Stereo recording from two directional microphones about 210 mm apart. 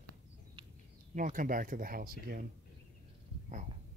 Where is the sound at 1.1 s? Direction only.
40° right (ahead or behind).